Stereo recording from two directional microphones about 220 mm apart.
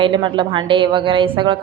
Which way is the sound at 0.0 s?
20° right (ahead or behind).